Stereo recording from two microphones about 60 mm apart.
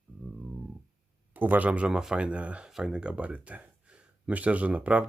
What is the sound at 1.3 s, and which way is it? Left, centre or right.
Speech, right.